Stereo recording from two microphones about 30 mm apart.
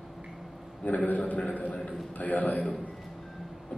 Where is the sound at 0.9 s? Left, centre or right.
Left.